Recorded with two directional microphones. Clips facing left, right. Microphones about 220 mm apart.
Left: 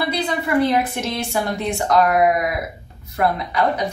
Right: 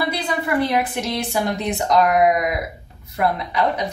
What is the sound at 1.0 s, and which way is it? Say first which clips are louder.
A woman's voice: right 1 dB; 15° right (ahead or behind).